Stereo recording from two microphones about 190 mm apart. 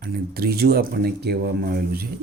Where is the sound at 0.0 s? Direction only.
55° right (ahead or behind).